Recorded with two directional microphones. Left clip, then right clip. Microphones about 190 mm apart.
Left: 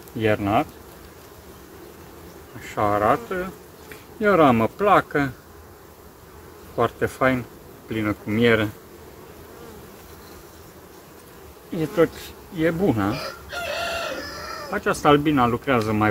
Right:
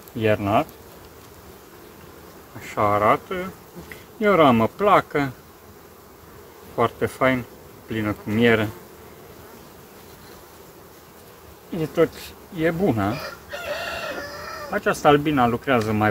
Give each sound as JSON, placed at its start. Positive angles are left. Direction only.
{"t": 0.2, "sound": "speech", "side_deg": -10}
{"t": 2.6, "sound": "speech", "side_deg": -15}
{"t": 6.8, "sound": "speech", "side_deg": -10}
{"t": 11.7, "sound": "speech", "side_deg": -10}
{"t": 13.1, "sound": "chicken", "side_deg": 50}
{"t": 14.7, "sound": "speech", "side_deg": -5}